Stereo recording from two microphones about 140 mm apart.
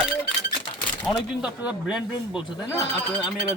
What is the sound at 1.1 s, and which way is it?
A man's voice, 5° right (ahead or behind).